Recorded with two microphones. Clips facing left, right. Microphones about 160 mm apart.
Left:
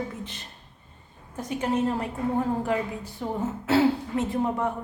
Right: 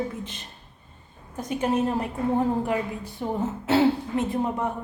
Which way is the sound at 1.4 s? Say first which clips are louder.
Right 2 dB; 20° right (ahead or behind).